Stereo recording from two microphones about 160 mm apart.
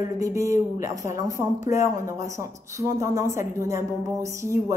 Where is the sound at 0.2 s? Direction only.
20° right (ahead or behind).